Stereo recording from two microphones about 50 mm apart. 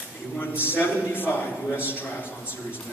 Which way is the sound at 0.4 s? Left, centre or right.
Left.